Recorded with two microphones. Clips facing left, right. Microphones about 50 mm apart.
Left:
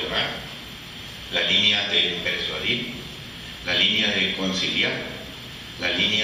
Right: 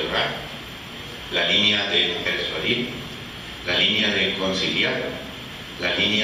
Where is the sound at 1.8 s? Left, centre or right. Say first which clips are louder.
Right 1 dB; centre.